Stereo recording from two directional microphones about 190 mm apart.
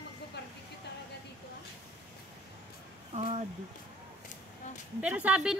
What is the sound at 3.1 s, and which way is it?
Speech, 35° right (ahead or behind).